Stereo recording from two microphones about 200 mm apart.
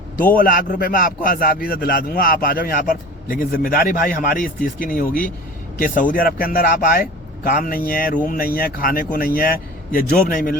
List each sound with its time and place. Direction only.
0.3 s a man's voice: 45° left (ahead or behind)